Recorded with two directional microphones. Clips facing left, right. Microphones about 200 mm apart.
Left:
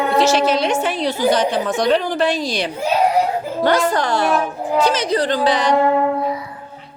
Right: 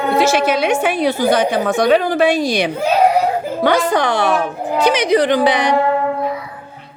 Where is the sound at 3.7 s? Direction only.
60° right (ahead or behind).